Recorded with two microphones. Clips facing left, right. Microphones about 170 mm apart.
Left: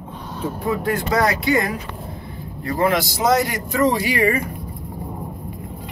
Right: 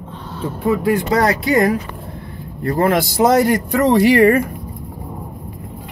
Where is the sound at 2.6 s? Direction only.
50° right (ahead or behind).